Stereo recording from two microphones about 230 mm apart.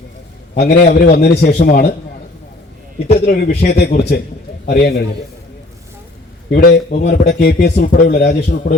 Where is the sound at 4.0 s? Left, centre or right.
Left.